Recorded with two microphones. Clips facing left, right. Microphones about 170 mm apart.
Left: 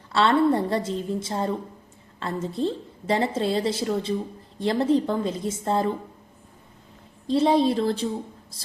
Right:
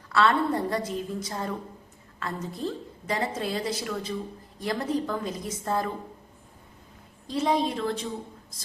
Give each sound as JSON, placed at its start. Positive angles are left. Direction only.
{"t": 0.1, "sound": "a woman's voice", "side_deg": 25}
{"t": 7.3, "sound": "a woman's voice", "side_deg": 30}